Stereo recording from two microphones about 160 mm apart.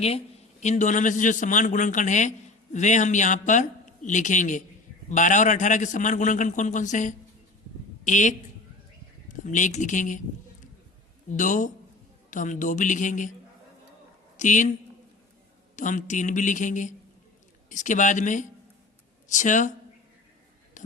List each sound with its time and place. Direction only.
0.6 s a man's voice: 45° left (ahead or behind)
11.3 s a man's voice: 55° left (ahead or behind)
14.3 s a woman's voice: 50° left (ahead or behind)
15.7 s a man's voice: 50° left (ahead or behind)
20.8 s a sound: 50° left (ahead or behind)